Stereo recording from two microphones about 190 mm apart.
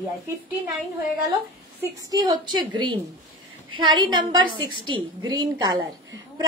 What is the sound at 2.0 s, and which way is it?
A child's voice, 20° right (ahead or behind).